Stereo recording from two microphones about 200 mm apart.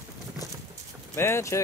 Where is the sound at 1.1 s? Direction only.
10° left (ahead or behind).